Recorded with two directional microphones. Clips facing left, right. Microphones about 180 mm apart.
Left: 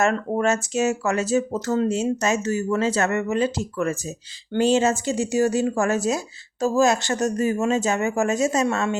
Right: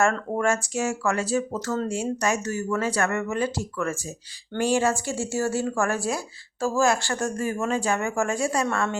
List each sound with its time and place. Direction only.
0.0 s speech: 20° left (ahead or behind)